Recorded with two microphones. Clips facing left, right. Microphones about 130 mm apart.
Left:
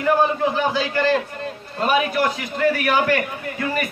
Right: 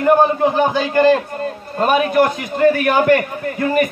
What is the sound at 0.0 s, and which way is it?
A man's voice, 50° right (ahead or behind).